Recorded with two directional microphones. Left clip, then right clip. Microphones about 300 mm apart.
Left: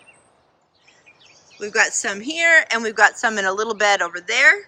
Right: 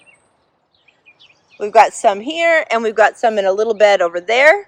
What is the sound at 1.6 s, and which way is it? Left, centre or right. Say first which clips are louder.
Speech: right 9 dB; centre.